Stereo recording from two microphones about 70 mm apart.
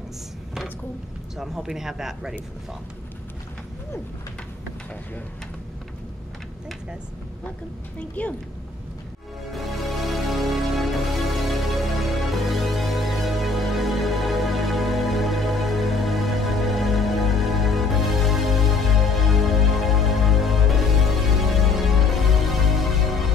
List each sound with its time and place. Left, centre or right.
1.3 s speech: centre
8.2 s a woman's voice: centre
9.5 s music: centre